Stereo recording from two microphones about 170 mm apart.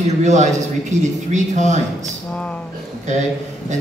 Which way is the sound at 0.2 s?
45° right (ahead or behind).